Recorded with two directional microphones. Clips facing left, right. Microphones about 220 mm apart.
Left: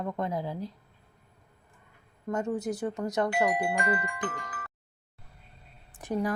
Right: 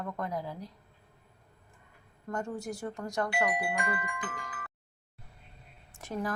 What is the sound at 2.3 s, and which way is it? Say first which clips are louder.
A woman's voice: left 6 dB; 20° left (ahead or behind).